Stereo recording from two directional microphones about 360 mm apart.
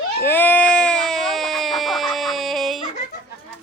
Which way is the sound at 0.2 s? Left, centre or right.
Centre.